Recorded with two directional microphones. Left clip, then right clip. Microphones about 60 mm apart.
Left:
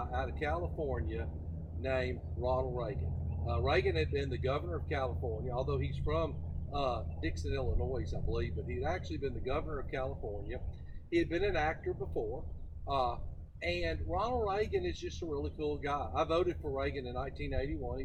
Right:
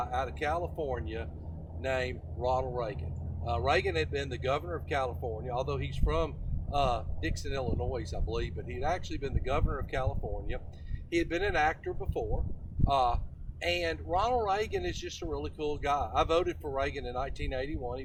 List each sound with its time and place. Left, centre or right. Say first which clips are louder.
0.0 s speech: right 5 dB; right
11.1 s a man's voice: right 2 dB; right